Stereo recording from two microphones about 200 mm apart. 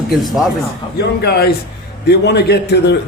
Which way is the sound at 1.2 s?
55° left (ahead or behind).